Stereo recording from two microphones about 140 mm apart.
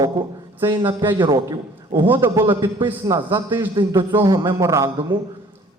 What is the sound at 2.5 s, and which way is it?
A man's voice, 30° right (ahead or behind).